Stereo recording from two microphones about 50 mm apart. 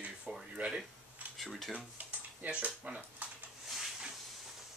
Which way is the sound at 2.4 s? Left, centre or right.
Right.